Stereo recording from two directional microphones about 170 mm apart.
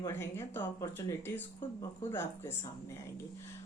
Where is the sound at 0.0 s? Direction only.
15° left (ahead or behind).